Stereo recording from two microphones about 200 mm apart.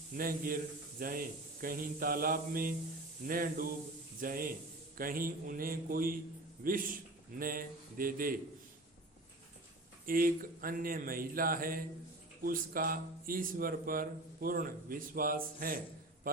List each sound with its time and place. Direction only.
0.2 s speech: 45° right (ahead or behind)
10.1 s speech: 45° right (ahead or behind)